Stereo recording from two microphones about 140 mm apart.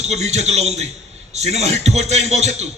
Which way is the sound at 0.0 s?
50° right (ahead or behind).